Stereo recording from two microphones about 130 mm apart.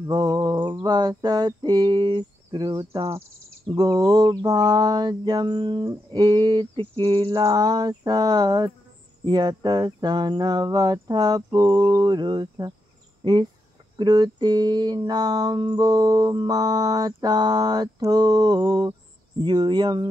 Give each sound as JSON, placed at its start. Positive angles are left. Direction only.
{"t": 0.0, "sound": "mantra", "side_deg": -30}
{"t": 13.2, "sound": "speech", "side_deg": -35}
{"t": 13.9, "sound": "mantra", "side_deg": -35}